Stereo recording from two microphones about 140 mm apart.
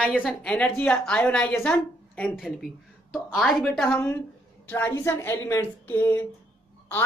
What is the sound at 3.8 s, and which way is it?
A woman's voice, 15° left (ahead or behind).